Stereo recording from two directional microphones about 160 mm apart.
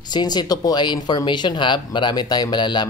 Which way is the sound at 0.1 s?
25° left (ahead or behind).